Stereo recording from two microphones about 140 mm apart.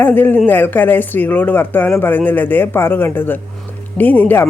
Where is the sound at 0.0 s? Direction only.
15° left (ahead or behind).